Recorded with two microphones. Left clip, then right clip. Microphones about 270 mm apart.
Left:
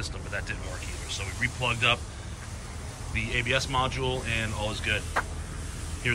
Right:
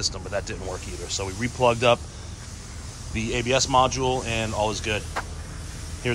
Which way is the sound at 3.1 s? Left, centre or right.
Centre.